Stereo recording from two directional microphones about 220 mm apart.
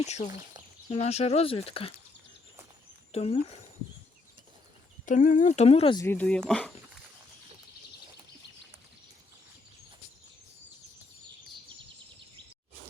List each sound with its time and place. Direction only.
0.0 s speech: 30° left (ahead or behind)
3.1 s speech: 25° left (ahead or behind)
5.0 s speech: 35° left (ahead or behind)
6.1 s speech: 5° left (ahead or behind)